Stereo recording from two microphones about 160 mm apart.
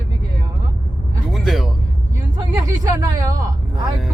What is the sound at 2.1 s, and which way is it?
Speech, 20° right (ahead or behind).